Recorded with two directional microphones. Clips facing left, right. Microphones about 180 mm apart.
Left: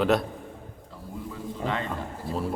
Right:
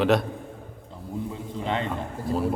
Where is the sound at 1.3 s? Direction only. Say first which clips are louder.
Left 1 dB; 25° right (ahead or behind).